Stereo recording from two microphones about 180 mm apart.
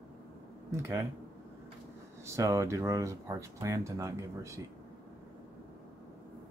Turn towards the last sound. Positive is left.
turn(degrees=-15)  # may be behind; listen again after turning